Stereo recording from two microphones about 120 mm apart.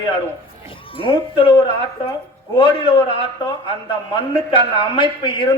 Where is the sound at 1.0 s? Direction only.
45° left (ahead or behind).